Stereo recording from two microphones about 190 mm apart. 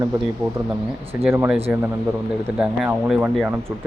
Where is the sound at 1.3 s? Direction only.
10° right (ahead or behind).